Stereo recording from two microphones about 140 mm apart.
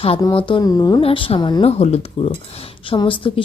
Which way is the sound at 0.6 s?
25° left (ahead or behind).